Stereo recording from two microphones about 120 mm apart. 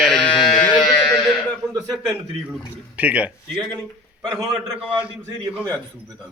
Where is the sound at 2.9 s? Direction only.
10° right (ahead or behind).